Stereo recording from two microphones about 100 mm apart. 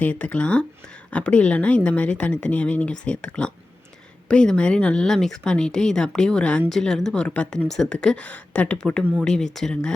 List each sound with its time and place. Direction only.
0.0 s speech: 15° left (ahead or behind)